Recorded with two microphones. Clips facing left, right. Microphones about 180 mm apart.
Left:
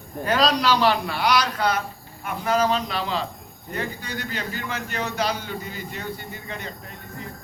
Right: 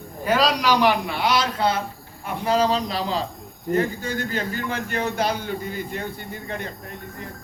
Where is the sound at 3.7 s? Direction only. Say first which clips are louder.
Right 8 dB; 45° right (ahead or behind).